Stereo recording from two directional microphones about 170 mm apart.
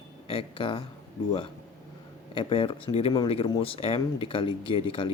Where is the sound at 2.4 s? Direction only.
30° left (ahead or behind).